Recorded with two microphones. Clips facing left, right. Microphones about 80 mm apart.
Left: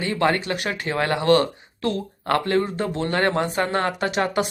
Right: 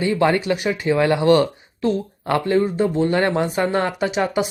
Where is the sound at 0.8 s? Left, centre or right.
Left.